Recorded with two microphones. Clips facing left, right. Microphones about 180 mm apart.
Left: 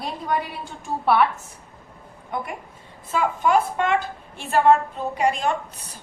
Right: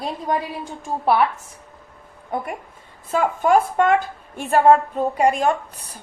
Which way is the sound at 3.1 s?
45° right (ahead or behind).